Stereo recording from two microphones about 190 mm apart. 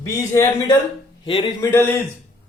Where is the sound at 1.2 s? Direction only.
25° left (ahead or behind).